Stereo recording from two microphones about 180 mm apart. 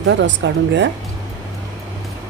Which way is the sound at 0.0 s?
90° right.